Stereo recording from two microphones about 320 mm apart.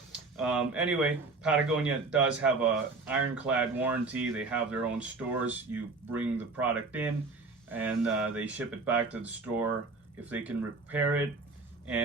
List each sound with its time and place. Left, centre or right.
0.1 s speech: centre